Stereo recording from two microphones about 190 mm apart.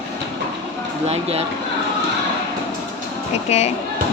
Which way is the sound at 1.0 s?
35° right (ahead or behind).